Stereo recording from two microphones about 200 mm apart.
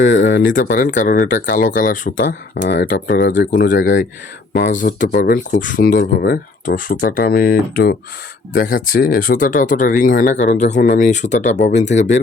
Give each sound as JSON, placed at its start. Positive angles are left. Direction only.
{"t": 0.1, "sound": "speech", "side_deg": 70}
{"t": 0.5, "sound": "speech", "side_deg": 45}
{"t": 2.9, "sound": "speech", "side_deg": 55}